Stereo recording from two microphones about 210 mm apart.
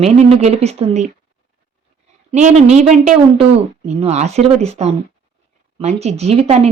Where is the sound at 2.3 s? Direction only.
30° right (ahead or behind).